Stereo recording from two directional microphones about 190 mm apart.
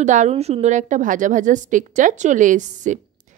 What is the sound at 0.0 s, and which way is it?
A woman's voice, 40° right (ahead or behind).